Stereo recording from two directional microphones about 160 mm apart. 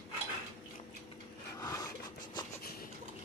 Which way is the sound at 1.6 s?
20° left (ahead or behind).